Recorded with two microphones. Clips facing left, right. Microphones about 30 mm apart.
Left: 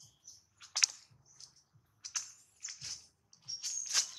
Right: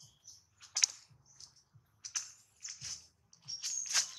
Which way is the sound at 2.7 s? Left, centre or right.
Centre.